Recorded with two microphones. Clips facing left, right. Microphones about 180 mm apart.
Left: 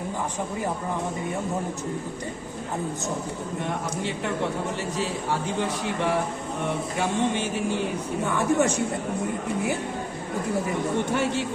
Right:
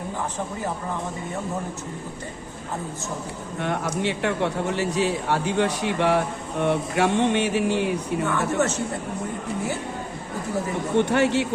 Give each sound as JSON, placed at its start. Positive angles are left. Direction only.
{"t": 4.7, "sound": "a man's voice", "side_deg": -70}
{"t": 8.3, "sound": "speech", "side_deg": 15}
{"t": 11.1, "sound": "a man's voice", "side_deg": -70}